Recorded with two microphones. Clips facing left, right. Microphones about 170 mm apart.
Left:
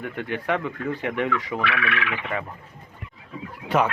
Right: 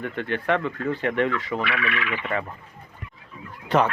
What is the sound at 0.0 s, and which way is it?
Speech, 10° left (ahead or behind).